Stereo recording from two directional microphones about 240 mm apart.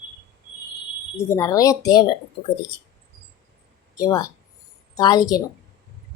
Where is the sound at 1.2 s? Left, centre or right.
Centre.